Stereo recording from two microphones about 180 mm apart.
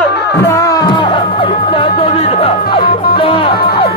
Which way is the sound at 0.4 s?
15° left (ahead or behind).